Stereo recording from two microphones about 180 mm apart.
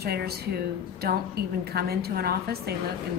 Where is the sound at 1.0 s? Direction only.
60° right (ahead or behind).